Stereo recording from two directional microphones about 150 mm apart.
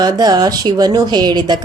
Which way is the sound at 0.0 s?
25° right (ahead or behind).